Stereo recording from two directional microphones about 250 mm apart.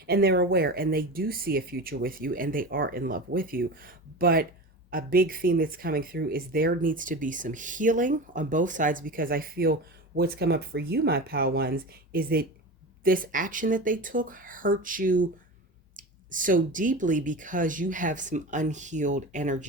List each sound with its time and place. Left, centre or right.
0.0 s speech: right